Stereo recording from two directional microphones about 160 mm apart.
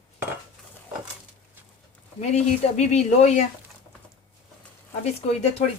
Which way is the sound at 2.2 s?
45° left (ahead or behind).